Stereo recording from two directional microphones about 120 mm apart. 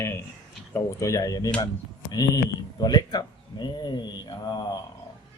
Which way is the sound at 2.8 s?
35° left (ahead or behind).